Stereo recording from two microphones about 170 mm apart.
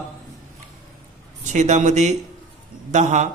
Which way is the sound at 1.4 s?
45° right (ahead or behind).